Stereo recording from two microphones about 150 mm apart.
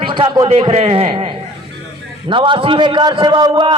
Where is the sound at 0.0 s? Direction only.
30° right (ahead or behind).